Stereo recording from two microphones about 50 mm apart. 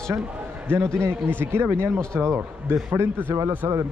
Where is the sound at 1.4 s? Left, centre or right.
Right.